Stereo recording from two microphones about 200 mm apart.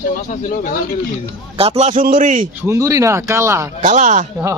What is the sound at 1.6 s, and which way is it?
Speech, 30° right (ahead or behind).